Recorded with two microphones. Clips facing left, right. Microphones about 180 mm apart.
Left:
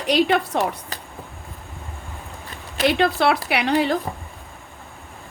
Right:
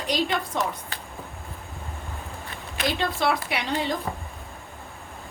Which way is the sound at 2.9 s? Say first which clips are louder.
Left 5 dB; 70° left (ahead or behind).